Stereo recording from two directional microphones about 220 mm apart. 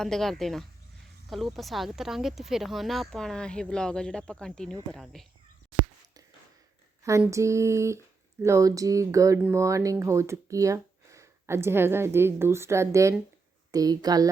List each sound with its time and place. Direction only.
0.0 s speech: centre (ahead or behind)
7.0 s speech: 15° right (ahead or behind)